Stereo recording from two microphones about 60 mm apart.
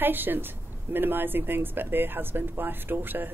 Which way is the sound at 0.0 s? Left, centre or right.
Right.